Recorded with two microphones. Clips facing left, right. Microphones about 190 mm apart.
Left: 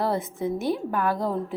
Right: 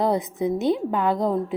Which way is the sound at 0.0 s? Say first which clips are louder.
Right 4 dB; 15° right (ahead or behind).